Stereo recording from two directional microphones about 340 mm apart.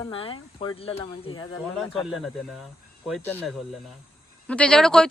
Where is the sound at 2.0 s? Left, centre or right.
Centre.